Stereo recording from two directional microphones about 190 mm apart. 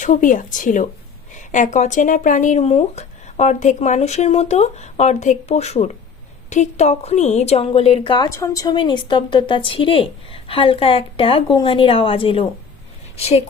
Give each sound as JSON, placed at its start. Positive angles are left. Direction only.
{"t": 0.0, "sound": "a woman's voice", "side_deg": 40}